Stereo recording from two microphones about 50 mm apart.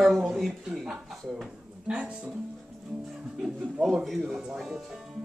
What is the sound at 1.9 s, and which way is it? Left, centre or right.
Speech, right.